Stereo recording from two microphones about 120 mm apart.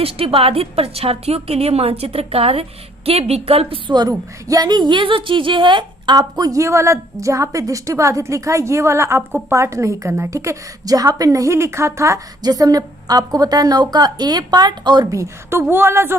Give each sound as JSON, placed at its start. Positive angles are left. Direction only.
{"t": 0.0, "sound": "a woman's voice", "side_deg": -50}